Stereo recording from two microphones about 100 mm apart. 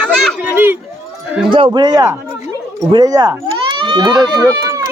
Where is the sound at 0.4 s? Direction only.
20° right (ahead or behind).